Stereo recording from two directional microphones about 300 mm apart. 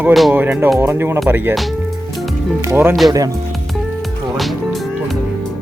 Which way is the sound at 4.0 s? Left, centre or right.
Centre.